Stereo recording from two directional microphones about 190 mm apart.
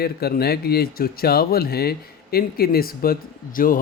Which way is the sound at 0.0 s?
55° left (ahead or behind).